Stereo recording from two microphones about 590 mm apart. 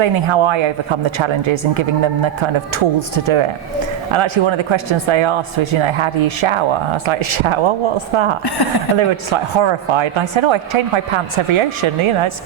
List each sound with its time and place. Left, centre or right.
0.0 s speech: right
4.1 s speech: right
8.4 s speech: left
9.0 s speech: right